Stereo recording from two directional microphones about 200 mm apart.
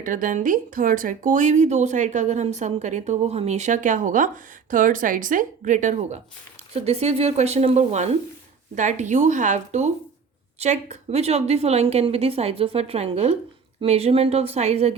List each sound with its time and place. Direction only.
0.0 s speech: 40° right (ahead or behind)